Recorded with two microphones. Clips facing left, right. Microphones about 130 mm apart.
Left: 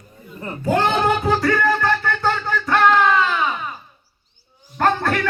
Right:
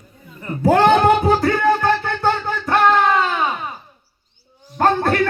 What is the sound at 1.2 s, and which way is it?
Music, 25° right (ahead or behind).